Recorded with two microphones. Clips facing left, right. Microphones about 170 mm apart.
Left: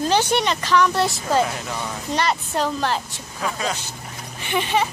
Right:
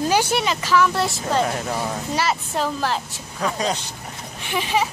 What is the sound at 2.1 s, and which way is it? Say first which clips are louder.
Speech: left 2 dB; 5° right (ahead or behind).